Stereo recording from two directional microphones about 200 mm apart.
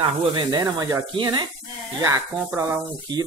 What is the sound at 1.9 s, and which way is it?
Stir, 15° right (ahead or behind).